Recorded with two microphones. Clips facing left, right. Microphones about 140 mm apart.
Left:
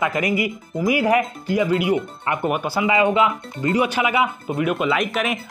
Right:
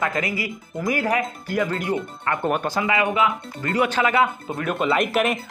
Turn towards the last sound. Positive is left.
turn(degrees=0)  # may be behind; listen again after turning